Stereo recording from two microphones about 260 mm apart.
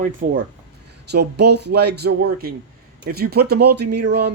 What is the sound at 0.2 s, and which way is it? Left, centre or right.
Speech, right.